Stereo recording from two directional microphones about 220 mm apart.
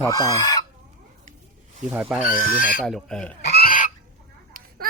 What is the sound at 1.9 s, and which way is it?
Speech, 10° right (ahead or behind).